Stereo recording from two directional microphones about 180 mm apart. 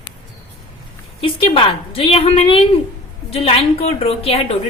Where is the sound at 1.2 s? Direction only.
30° left (ahead or behind).